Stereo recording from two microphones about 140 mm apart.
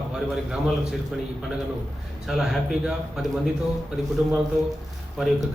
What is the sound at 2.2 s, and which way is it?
A man's voice, centre (ahead or behind).